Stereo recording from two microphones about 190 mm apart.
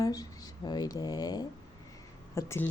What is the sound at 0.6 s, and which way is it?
Speech, 20° left (ahead or behind).